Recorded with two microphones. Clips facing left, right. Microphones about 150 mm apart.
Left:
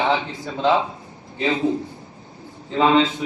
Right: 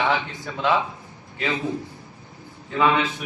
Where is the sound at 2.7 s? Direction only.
25° left (ahead or behind).